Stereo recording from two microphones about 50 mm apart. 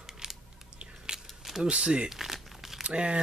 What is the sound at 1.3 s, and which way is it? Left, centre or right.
Keys jangling, centre.